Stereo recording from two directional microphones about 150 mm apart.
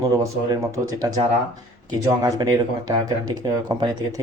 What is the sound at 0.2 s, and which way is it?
Speech, 20° right (ahead or behind).